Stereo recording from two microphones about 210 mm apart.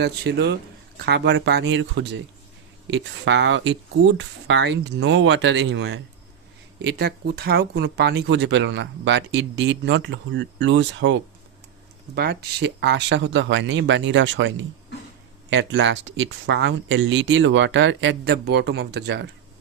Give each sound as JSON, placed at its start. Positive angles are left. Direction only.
{"t": 0.0, "sound": "speech", "side_deg": -55}